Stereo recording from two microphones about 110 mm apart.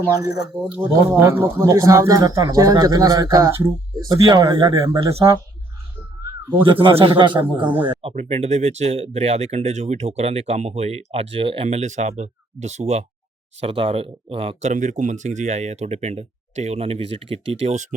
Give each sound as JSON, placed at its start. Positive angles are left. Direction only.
{"t": 0.0, "sound": "speech", "side_deg": -30}
{"t": 5.1, "sound": "speech", "side_deg": -60}
{"t": 6.6, "sound": "a man's voice", "side_deg": -50}
{"t": 8.1, "sound": "speech", "side_deg": -80}
{"t": 13.6, "sound": "speech", "side_deg": -60}